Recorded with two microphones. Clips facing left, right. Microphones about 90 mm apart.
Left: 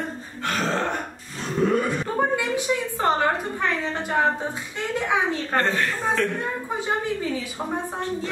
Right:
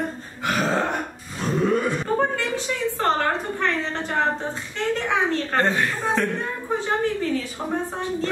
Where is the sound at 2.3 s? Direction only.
15° left (ahead or behind).